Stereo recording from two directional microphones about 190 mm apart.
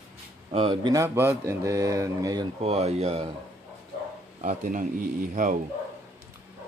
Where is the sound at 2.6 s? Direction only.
35° right (ahead or behind).